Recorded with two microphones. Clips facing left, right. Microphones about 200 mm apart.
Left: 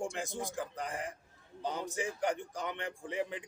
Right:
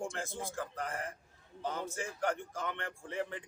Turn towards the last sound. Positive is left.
turn(degrees=15)  # may be behind; listen again after turning